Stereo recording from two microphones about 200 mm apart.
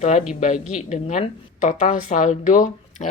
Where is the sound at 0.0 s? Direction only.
35° left (ahead or behind).